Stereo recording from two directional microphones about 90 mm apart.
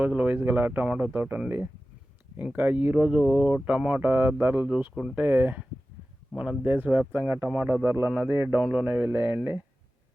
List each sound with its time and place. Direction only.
0.0 s speech: 15° right (ahead or behind)
8.5 s speech: 15° right (ahead or behind)